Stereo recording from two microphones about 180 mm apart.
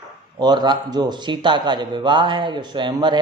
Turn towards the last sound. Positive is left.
turn(degrees=-25)  # may be behind; listen again after turning